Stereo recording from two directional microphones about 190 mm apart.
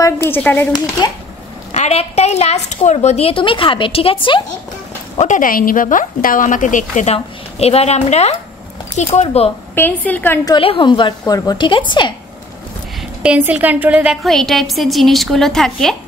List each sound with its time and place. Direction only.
0.0 s speech: 10° left (ahead or behind)
1.7 s speech: 35° left (ahead or behind)
5.1 s speech: 40° left (ahead or behind)
9.8 s speech: 10° left (ahead or behind)
10.5 s a woman's voice: 25° left (ahead or behind)
13.2 s a woman's voice: 5° right (ahead or behind)